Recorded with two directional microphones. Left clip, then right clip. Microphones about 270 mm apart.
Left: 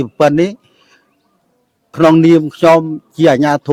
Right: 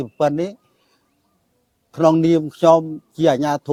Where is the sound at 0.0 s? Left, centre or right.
Left.